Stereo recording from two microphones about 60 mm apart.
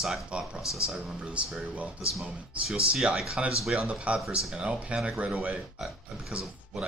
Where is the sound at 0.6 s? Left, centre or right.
Left.